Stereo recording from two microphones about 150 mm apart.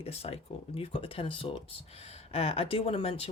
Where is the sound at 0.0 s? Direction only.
40° left (ahead or behind).